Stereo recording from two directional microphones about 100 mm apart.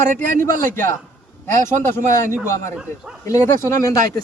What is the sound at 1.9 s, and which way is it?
A man's voice, 25° left (ahead or behind).